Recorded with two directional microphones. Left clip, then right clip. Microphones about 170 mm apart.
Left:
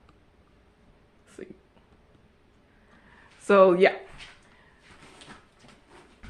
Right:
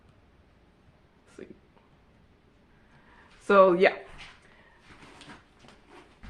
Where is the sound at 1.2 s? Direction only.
30° left (ahead or behind).